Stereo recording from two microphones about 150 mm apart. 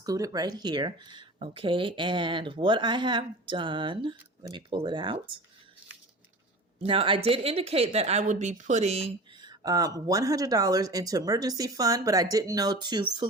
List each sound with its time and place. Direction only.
0.0 s speech: 25° right (ahead or behind)
6.7 s speech: 35° right (ahead or behind)
9.4 s speech: 25° right (ahead or behind)